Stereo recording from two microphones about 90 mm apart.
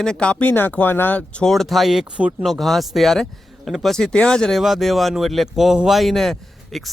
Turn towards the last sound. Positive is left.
turn(degrees=0)  # may be behind; listen again after turning